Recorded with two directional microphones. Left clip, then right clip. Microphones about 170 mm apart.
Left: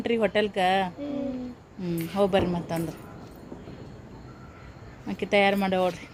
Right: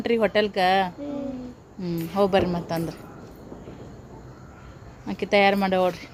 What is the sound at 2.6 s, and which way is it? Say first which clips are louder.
Speech: right 3 dB; 5° right (ahead or behind).